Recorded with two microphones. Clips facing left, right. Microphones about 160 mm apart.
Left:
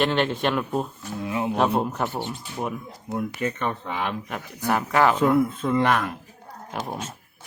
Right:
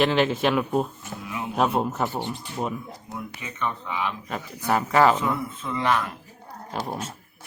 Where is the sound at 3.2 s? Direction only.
55° left (ahead or behind).